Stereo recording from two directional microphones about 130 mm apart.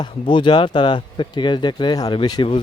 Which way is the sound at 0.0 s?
35° left (ahead or behind).